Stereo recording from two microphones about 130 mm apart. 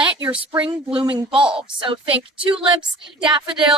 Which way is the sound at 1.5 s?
40° right (ahead or behind).